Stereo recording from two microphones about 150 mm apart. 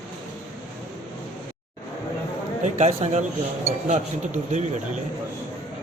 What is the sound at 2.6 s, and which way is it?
Speech, 50° right (ahead or behind).